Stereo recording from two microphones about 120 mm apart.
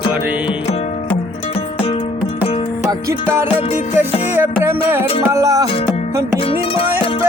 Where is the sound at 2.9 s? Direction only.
25° right (ahead or behind).